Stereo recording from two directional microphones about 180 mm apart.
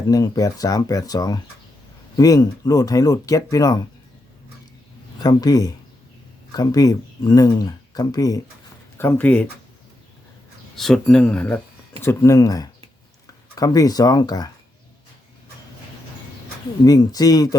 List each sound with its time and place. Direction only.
0.1 s speech: 20° left (ahead or behind)
5.2 s speech: 20° left (ahead or behind)
10.8 s speech: centre (ahead or behind); by 14.5 s 20° left (ahead or behind)
16.8 s speech: 20° left (ahead or behind)